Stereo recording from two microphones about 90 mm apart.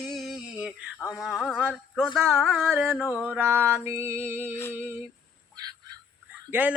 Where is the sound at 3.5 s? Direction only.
25° right (ahead or behind).